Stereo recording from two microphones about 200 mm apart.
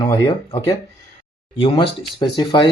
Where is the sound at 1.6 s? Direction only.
25° left (ahead or behind).